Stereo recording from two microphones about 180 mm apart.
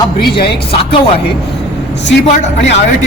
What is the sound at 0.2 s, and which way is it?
Speech, 60° left (ahead or behind).